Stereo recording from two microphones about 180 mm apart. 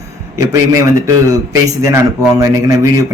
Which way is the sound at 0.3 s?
15° right (ahead or behind).